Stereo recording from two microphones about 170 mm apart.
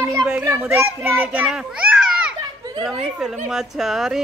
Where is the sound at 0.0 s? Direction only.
20° right (ahead or behind).